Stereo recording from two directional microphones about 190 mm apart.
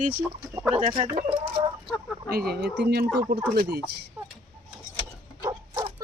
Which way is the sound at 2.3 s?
55° right (ahead or behind).